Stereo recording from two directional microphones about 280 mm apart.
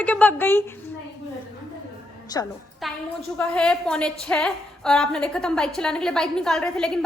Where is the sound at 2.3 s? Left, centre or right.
Centre.